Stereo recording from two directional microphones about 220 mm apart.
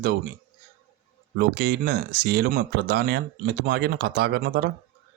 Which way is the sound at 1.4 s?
45° right (ahead or behind).